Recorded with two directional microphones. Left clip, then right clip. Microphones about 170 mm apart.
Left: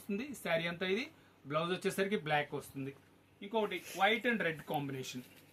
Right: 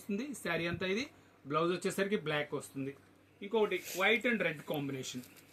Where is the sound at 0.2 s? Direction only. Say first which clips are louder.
Left 2 dB; 20° left (ahead or behind).